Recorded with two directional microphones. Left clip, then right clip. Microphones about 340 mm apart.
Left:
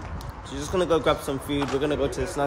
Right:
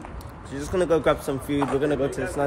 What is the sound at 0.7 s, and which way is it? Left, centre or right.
Speech, centre.